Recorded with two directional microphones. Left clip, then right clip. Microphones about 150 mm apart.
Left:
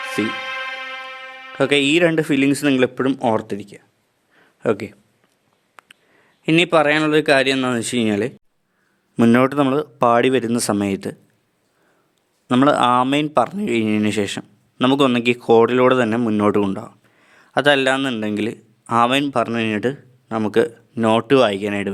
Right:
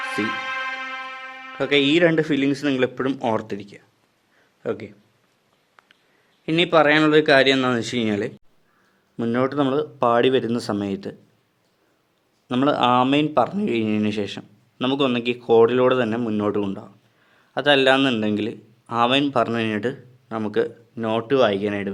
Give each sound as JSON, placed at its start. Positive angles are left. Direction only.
{"t": 0.0, "sound": "music", "side_deg": 10}
{"t": 1.5, "sound": "speech", "side_deg": 40}
{"t": 4.6, "sound": "speech", "side_deg": 45}
{"t": 5.8, "sound": "a sound", "side_deg": 45}
{"t": 6.4, "sound": "speech", "side_deg": 40}
{"t": 9.1, "sound": "speech", "side_deg": 50}
{"t": 12.5, "sound": "speech", "side_deg": 40}